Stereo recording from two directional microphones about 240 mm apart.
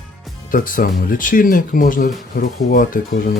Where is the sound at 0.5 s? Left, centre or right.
Left.